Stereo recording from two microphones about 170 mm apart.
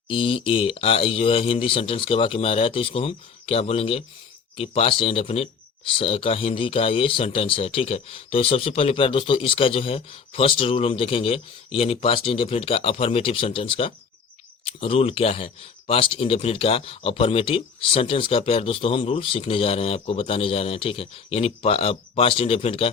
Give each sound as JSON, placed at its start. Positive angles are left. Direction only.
{"t": 0.1, "sound": "speech", "side_deg": 30}